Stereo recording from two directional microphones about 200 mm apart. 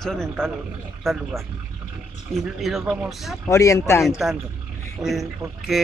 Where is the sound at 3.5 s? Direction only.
15° left (ahead or behind).